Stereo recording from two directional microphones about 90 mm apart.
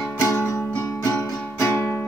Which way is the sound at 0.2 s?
30° left (ahead or behind).